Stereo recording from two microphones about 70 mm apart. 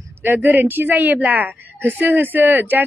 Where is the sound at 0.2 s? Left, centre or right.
Right.